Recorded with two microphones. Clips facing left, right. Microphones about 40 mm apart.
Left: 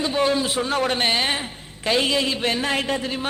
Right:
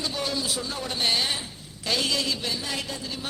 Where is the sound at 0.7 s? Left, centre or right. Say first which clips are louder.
Left 9 dB; left.